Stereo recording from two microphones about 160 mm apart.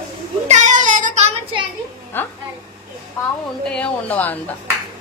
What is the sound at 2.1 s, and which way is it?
Speech, 15° left (ahead or behind).